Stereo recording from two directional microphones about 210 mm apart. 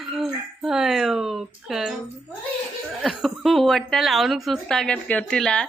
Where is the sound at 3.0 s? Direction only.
Centre (ahead or behind).